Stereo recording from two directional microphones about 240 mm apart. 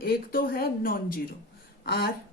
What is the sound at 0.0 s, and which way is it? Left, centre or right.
Speech, left.